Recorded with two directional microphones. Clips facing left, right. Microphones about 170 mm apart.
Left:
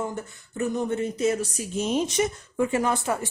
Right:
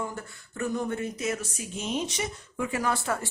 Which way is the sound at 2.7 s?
20° left (ahead or behind).